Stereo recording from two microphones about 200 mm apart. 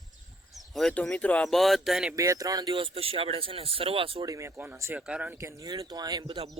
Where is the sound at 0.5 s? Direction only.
Centre (ahead or behind).